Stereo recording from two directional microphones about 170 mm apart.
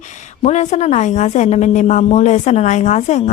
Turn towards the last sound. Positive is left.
turn(degrees=45)  # may be behind; listen again after turning